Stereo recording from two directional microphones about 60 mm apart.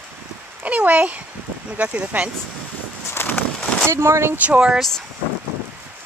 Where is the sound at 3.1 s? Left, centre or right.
Left.